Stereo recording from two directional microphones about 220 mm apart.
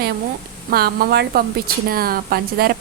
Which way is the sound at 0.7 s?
45° right (ahead or behind).